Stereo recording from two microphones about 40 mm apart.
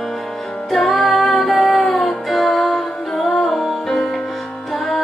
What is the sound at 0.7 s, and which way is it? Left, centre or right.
Music, centre.